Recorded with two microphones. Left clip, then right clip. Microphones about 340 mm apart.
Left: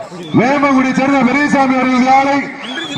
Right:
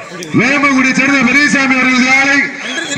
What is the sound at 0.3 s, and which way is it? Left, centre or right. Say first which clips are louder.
A man's voice: right 1 dB; left.